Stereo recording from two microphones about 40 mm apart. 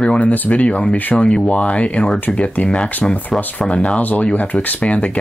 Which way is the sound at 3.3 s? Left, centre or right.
Centre.